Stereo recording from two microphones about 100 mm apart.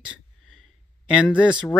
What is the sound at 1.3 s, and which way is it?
Speech, 10° right (ahead or behind).